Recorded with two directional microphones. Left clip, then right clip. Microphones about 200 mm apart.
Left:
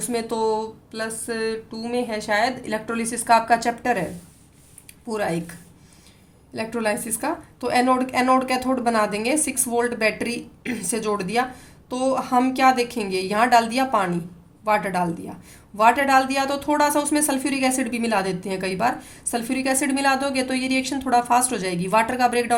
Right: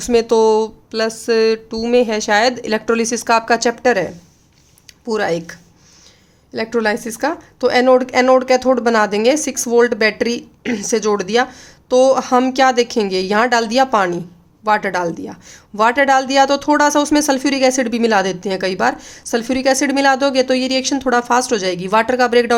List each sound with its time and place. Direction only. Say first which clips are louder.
0.0 s a woman's voice: right 11 dB; 45° right (ahead or behind)
5.1 s a woman's voice: right 7 dB; 40° right (ahead or behind)